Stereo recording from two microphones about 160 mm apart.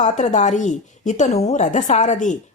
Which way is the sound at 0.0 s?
50° left (ahead or behind).